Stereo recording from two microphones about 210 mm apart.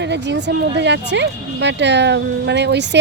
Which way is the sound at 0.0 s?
55° right (ahead or behind).